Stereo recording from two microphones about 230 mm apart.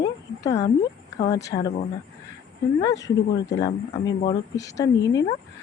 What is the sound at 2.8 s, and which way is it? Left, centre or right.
Speech, centre.